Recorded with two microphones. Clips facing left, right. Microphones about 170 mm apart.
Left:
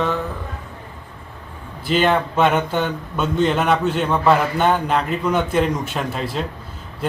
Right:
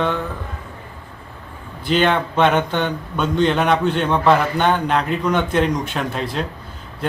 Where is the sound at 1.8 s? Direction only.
5° left (ahead or behind).